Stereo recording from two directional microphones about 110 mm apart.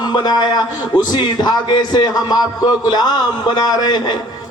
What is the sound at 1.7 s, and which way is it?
A man's voice, 40° left (ahead or behind).